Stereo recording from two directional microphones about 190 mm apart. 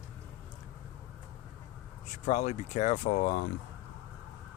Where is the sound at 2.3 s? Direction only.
35° left (ahead or behind).